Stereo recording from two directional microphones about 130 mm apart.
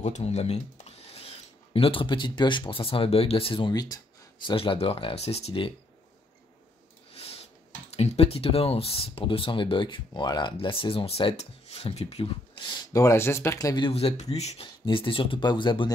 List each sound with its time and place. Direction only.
0.0 s speech: 55° left (ahead or behind)
3.7 s speech: 30° left (ahead or behind)
4.5 s speech: 45° left (ahead or behind)
7.2 s a sound: 50° left (ahead or behind)
7.9 s speech: 50° left (ahead or behind)
12.9 s speech: 20° left (ahead or behind)
13.8 s speech: 50° left (ahead or behind)
14.9 s speech: 40° left (ahead or behind)